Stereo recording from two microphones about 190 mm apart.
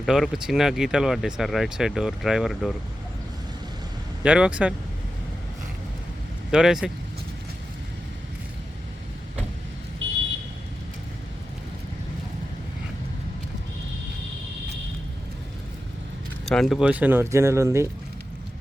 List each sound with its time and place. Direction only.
0.0 s speech: centre (ahead or behind)
4.2 s speech: 5° right (ahead or behind)
6.5 s speech: 5° right (ahead or behind)
10.0 s vehicle: 75° right (ahead or behind)
16.5 s speech: centre (ahead or behind); by 17.8 s 15° right (ahead or behind)